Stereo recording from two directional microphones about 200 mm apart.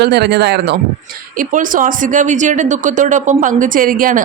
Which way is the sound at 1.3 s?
40° right (ahead or behind).